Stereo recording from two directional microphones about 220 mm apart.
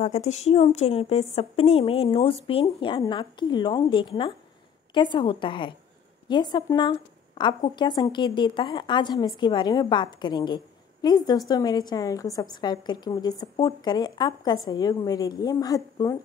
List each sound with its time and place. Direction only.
0.0 s a woman's voice: 30° left (ahead or behind); by 16.2 s 15° left (ahead or behind)